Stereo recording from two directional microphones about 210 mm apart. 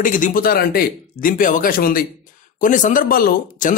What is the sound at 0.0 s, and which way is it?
Speech, 40° left (ahead or behind).